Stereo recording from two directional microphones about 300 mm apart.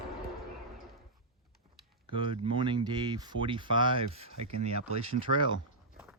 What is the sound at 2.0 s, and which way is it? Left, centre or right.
Speech, centre.